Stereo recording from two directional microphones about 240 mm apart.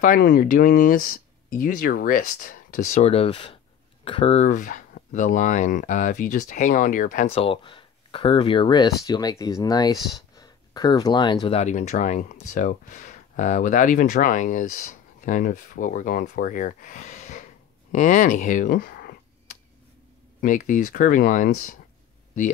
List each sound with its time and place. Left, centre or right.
0.0 s speech: left
20.3 s speech: left